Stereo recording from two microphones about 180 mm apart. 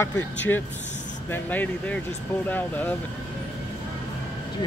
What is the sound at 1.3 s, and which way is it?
Speech, 10° left (ahead or behind).